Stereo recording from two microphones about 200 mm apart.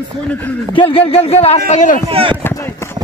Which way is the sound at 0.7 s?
25° left (ahead or behind).